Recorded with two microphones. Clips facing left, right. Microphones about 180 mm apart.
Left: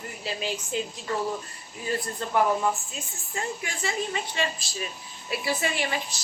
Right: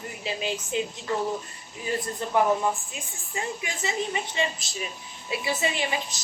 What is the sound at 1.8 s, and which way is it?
Speech, 20° right (ahead or behind).